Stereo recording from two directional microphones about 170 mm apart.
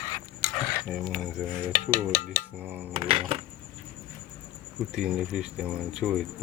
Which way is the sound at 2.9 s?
35° right (ahead or behind).